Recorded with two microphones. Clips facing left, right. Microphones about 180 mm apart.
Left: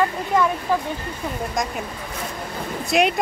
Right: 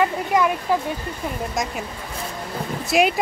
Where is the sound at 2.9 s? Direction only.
Centre (ahead or behind).